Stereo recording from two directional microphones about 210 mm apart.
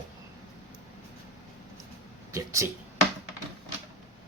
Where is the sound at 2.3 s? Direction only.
15° right (ahead or behind).